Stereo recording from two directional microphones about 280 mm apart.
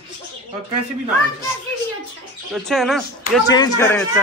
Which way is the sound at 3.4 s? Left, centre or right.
Centre.